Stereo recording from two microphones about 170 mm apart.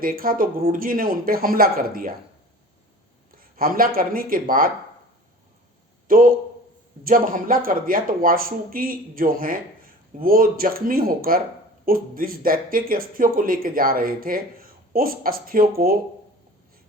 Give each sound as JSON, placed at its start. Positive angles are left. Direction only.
{"t": 0.0, "sound": "speech", "side_deg": -55}
{"t": 3.3, "sound": "speech", "side_deg": -55}
{"t": 6.1, "sound": "speech", "side_deg": -55}